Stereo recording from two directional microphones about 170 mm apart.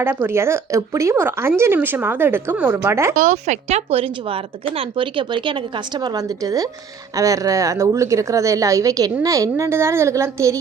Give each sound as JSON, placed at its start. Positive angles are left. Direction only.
{"t": 0.0, "sound": "speech", "side_deg": -15}
{"t": 3.2, "sound": "speech", "side_deg": -45}